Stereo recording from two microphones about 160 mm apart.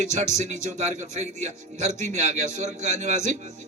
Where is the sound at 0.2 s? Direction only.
50° right (ahead or behind).